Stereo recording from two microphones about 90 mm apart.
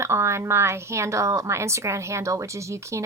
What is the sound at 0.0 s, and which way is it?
A woman's voice, 30° right (ahead or behind).